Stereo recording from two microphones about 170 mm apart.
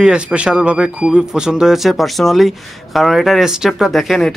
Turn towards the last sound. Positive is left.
turn(degrees=0)  # may be behind; listen again after turning